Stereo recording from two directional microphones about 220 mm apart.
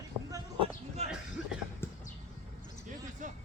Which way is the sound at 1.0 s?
30° right (ahead or behind).